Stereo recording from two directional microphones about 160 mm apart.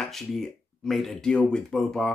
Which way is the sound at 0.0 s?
Centre (ahead or behind).